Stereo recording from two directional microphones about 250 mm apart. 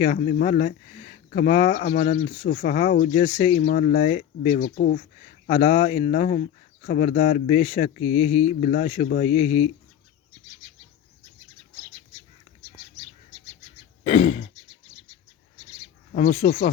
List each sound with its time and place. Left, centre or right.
0.0 s speech: left
14.0 s throat clearing: left
16.1 s speech: left